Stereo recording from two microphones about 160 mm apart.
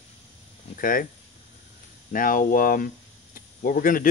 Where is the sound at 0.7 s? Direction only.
60° left (ahead or behind).